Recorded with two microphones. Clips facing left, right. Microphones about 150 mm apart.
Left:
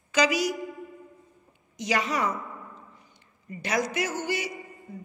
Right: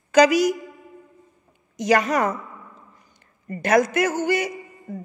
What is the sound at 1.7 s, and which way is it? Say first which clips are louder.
Speech: right 8 dB; 45° right (ahead or behind).